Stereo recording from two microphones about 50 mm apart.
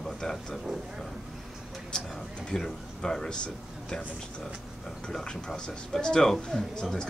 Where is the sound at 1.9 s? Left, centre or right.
Centre.